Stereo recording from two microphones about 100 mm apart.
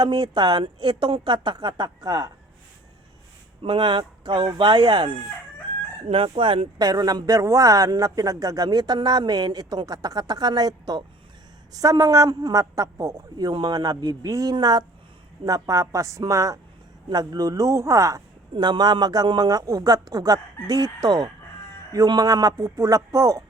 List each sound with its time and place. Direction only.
0.0 s a woman's voice: 45° right (ahead or behind)
3.6 s a woman's voice: 55° right (ahead or behind)
6.7 s speech: 40° right (ahead or behind)
13.3 s a woman's voice: 45° right (ahead or behind)
15.4 s speech: 35° right (ahead or behind)
18.5 s speech: 50° right (ahead or behind); by 23.4 s 30° right (ahead or behind)